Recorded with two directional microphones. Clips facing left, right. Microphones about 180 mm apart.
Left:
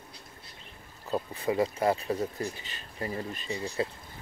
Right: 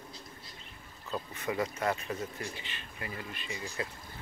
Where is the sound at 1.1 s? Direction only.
30° left (ahead or behind).